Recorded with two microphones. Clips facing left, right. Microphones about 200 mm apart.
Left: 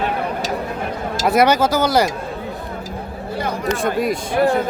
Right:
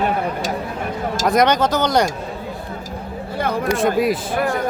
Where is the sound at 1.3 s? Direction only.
5° left (ahead or behind).